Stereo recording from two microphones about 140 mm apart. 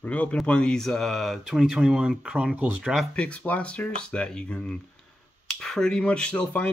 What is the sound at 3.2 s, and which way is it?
Speech, 10° left (ahead or behind).